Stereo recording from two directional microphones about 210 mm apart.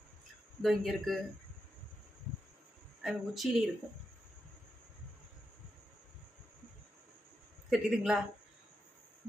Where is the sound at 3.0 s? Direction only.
Centre (ahead or behind).